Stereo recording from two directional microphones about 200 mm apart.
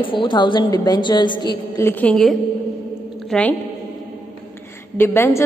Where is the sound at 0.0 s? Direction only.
25° left (ahead or behind).